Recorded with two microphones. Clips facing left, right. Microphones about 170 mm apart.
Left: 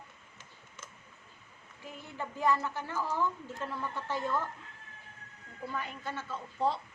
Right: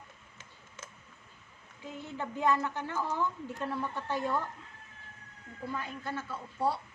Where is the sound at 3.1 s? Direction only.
15° right (ahead or behind).